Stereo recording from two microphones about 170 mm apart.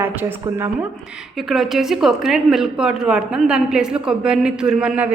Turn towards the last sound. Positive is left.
turn(degrees=-5)  # may be behind; listen again after turning